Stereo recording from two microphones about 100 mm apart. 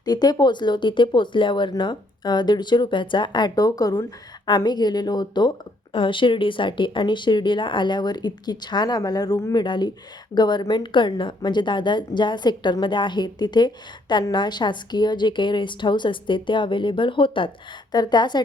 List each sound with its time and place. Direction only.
0.0 s a woman's voice: 45° left (ahead or behind); by 17.5 s 60° left (ahead or behind)
17.9 s a woman's voice: 45° left (ahead or behind)